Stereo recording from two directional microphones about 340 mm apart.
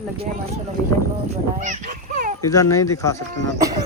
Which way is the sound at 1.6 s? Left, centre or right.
Right.